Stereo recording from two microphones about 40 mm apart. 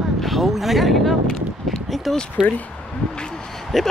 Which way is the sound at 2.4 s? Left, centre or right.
Centre.